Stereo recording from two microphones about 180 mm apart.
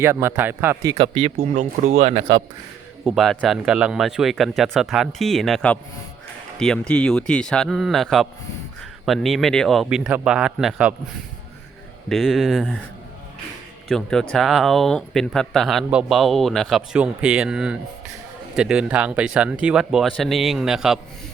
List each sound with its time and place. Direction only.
0.0 s speech: 15° right (ahead or behind); by 2.2 s 40° right (ahead or behind)
3.0 s speech: centre (ahead or behind)
12.0 s speech: centre (ahead or behind)
13.8 s speech: centre (ahead or behind)